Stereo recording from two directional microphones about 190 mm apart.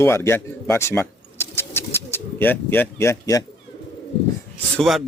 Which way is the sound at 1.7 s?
10° left (ahead or behind).